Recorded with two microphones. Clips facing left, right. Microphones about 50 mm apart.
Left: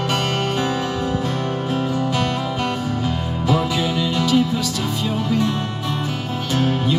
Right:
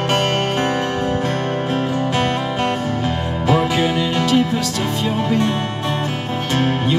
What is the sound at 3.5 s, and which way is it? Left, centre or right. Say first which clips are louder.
Music: right 3 dB; right.